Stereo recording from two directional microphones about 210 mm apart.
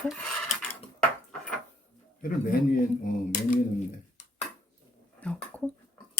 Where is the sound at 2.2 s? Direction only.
40° left (ahead or behind).